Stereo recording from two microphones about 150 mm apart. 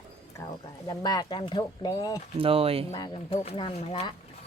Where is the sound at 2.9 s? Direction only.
25° left (ahead or behind).